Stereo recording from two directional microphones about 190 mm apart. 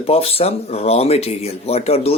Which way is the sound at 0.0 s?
30° left (ahead or behind).